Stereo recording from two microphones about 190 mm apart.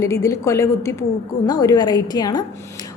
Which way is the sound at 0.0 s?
15° left (ahead or behind).